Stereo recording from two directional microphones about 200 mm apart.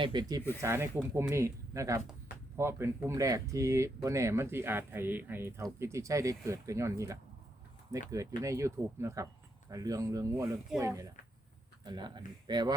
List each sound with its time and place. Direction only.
0.0 s speech: 20° right (ahead or behind)